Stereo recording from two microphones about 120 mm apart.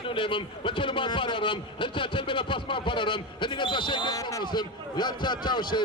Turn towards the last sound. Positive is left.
turn(degrees=40)  # may be behind; listen again after turning